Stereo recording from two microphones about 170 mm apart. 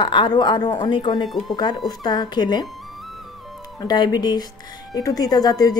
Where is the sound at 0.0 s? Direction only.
30° left (ahead or behind).